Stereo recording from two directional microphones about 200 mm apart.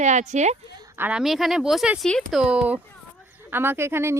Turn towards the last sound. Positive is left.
turn(degrees=-10)  # may be behind; listen again after turning